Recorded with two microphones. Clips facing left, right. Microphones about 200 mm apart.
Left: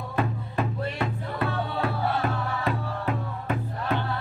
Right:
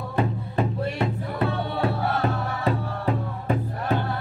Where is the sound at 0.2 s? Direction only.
20° right (ahead or behind).